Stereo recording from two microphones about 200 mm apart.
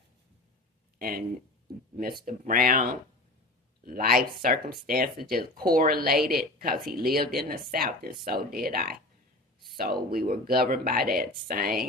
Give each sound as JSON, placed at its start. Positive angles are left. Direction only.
{"t": 0.9, "sound": "speech", "side_deg": -45}
{"t": 3.8, "sound": "speech", "side_deg": -45}